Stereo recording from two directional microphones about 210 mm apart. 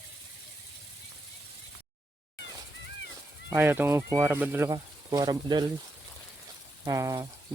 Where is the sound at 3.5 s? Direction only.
10° right (ahead or behind).